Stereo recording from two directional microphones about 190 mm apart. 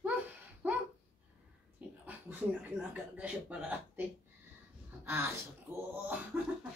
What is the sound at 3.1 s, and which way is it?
Speech, 5° right (ahead or behind).